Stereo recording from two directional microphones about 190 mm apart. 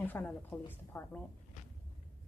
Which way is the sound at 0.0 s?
10° left (ahead or behind).